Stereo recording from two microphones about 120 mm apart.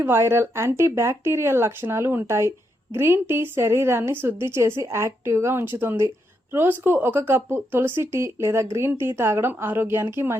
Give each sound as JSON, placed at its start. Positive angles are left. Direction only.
{"t": 0.0, "sound": "a woman's voice", "side_deg": -20}